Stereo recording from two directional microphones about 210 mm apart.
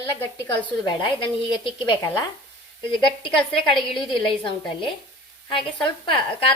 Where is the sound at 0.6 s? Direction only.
20° left (ahead or behind).